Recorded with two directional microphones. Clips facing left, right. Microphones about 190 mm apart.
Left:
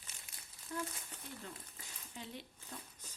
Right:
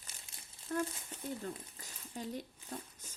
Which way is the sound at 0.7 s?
50° right (ahead or behind).